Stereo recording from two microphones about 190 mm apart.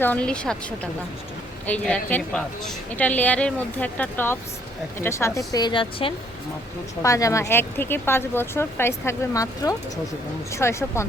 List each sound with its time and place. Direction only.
0.0 s speech: 5° left (ahead or behind)
1.6 s a woman's voice: 5° left (ahead or behind)